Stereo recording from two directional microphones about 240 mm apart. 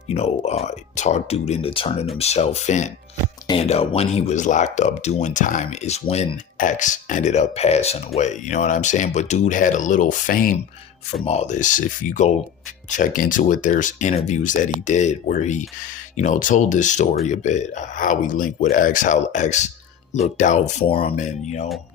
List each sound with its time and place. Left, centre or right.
0.1 s speech: left